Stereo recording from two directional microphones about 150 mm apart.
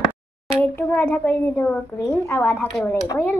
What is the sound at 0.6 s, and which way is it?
A child's voice, 15° left (ahead or behind).